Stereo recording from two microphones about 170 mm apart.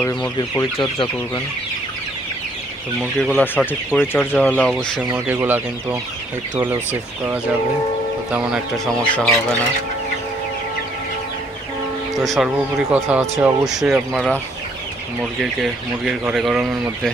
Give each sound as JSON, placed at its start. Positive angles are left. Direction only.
{"t": 0.4, "sound": "speech", "side_deg": 30}
{"t": 3.2, "sound": "speech", "side_deg": 5}
{"t": 5.1, "sound": "speech", "side_deg": -10}
{"t": 12.2, "sound": "speech", "side_deg": 0}
{"t": 15.6, "sound": "speech", "side_deg": -5}